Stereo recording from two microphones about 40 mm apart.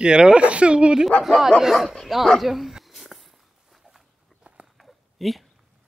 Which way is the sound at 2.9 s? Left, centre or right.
Centre.